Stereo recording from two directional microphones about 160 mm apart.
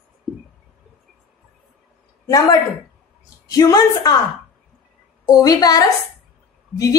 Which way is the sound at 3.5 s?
20° left (ahead or behind).